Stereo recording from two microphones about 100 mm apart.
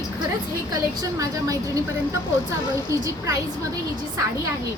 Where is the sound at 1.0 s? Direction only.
35° right (ahead or behind).